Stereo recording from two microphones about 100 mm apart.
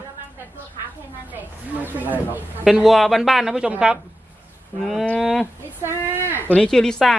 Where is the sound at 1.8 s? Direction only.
15° right (ahead or behind).